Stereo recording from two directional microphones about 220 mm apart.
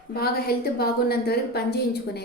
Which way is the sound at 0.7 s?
45° left (ahead or behind).